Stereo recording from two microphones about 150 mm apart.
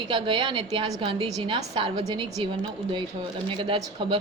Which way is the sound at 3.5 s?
35° right (ahead or behind).